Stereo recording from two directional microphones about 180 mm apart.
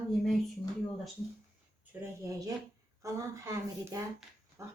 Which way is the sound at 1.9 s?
10° right (ahead or behind).